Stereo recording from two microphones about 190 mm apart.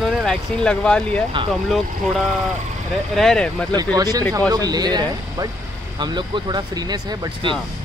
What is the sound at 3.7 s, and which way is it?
Speech, 20° right (ahead or behind).